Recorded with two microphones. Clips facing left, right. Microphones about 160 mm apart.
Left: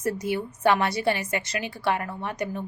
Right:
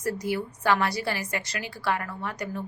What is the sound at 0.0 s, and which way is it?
A woman's voice, 25° left (ahead or behind).